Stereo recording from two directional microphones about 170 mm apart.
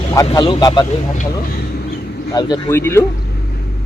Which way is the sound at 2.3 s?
25° left (ahead or behind).